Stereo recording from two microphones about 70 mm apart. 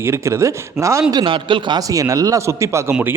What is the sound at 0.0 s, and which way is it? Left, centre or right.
A man's voice, right.